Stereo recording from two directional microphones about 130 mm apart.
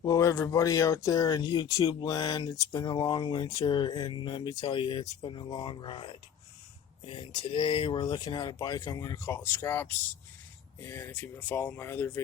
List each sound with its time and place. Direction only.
0.0 s speech: 25° left (ahead or behind)